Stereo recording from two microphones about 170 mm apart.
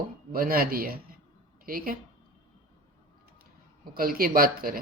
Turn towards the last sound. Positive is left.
turn(degrees=-60)  # may be behind; listen again after turning